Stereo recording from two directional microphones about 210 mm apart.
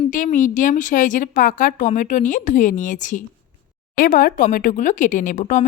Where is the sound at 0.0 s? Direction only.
40° left (ahead or behind).